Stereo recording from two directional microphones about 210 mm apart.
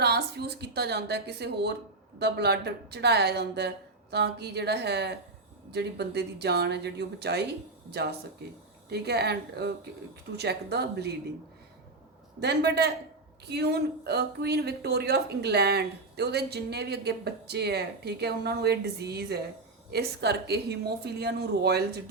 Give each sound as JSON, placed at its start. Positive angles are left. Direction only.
{"t": 0.0, "sound": "a sound", "side_deg": -50}
{"t": 2.1, "sound": "speech", "side_deg": -50}
{"t": 8.9, "sound": "speech", "side_deg": -50}
{"t": 12.4, "sound": "speech", "side_deg": -50}